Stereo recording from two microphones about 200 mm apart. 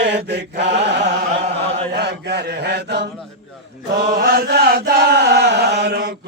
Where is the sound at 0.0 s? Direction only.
60° right (ahead or behind).